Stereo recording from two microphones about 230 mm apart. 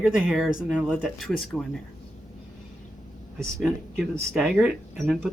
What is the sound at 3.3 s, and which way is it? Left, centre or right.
Speech, centre.